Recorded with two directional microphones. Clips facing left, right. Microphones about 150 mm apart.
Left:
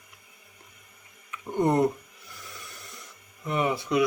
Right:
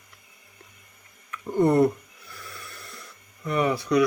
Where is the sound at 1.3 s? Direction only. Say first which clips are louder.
Right 3 dB; 20° left (ahead or behind).